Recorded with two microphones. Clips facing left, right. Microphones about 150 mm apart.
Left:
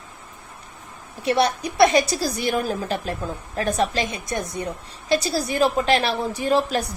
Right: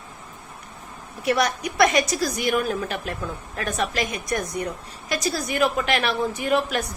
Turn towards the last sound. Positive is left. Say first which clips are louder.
# left 2 dB
turn(degrees=35)  # may be behind; listen again after turning